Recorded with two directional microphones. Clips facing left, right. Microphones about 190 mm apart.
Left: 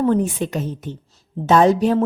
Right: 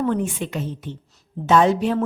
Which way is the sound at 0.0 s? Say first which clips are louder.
Left 4 dB; 35° left (ahead or behind).